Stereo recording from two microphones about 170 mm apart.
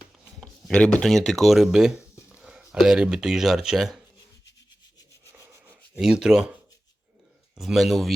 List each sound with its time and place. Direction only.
0.3 s speech: 5° left (ahead or behind)
5.3 s rub: 15° right (ahead or behind)
6.0 s speech: 5° right (ahead or behind)
7.5 s speech: centre (ahead or behind)